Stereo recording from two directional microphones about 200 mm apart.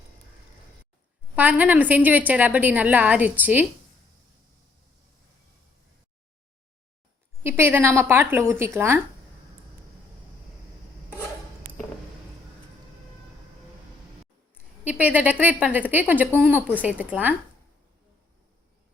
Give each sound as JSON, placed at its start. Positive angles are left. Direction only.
{"t": 1.4, "sound": "a woman's voice", "side_deg": -10}
{"t": 7.4, "sound": "a woman's voice", "side_deg": -10}
{"t": 14.8, "sound": "a woman's voice", "side_deg": -10}